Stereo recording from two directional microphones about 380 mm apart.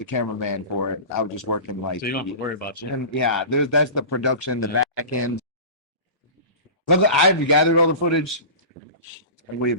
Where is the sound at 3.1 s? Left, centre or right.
Left.